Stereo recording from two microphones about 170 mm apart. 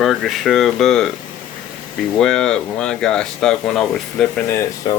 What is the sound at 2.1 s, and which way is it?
Speech, 5° left (ahead or behind).